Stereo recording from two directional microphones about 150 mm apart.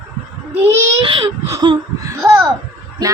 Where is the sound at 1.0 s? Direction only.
35° right (ahead or behind).